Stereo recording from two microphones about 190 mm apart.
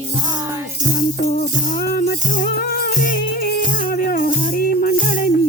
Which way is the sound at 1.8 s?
50° left (ahead or behind).